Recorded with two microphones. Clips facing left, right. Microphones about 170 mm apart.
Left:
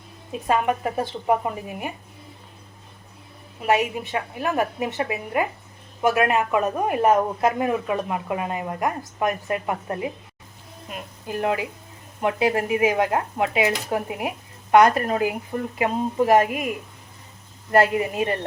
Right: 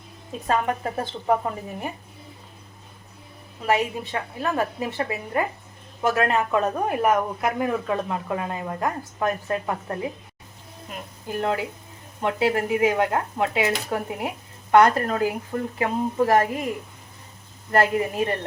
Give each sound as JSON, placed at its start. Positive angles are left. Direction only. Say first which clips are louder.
{"t": 0.4, "sound": "speech", "louder": "left 2 dB", "side_deg": 15}
{"t": 3.6, "sound": "speech", "louder": "left 2 dB", "side_deg": 15}
{"t": 10.8, "sound": "a sound", "louder": "left 1 dB", "side_deg": 20}
{"t": 12.2, "sound": "speech", "louder": "left 1 dB", "side_deg": 20}
{"t": 17.9, "sound": "speech", "louder": "even", "side_deg": 20}